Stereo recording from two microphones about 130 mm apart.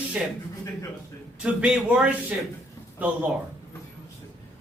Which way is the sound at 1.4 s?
10° right (ahead or behind).